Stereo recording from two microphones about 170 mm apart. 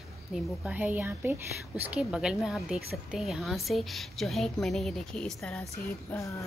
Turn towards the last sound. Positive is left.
turn(degrees=15)  # may be behind; listen again after turning